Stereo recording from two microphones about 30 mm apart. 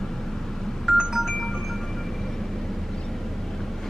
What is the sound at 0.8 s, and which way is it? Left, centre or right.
Telephone dialing, centre.